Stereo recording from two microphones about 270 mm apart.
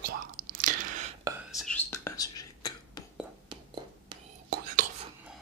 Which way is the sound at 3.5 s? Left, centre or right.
Centre.